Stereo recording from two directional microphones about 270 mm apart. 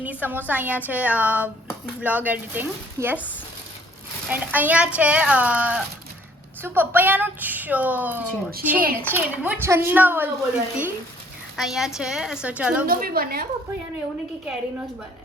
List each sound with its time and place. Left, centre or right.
0.0 s a woman's voice: centre
4.3 s a woman's voice: centre
12.8 s a woman's voice: right